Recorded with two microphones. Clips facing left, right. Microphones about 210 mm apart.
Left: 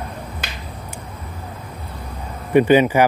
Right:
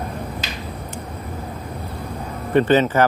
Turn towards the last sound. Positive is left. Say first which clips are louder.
# left 2 dB
turn(degrees=10)  # may be behind; listen again after turning